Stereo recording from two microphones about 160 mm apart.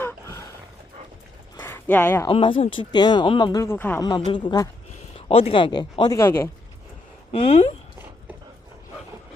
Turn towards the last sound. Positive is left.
turn(degrees=40)  # may be behind; listen again after turning